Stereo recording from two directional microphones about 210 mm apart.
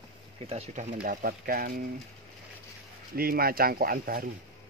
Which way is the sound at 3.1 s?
45° right (ahead or behind).